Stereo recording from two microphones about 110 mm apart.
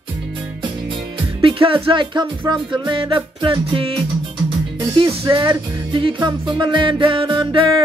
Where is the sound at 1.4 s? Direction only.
55° right (ahead or behind).